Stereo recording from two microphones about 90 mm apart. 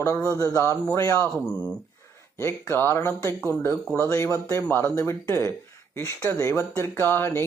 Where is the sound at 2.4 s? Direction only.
30° left (ahead or behind).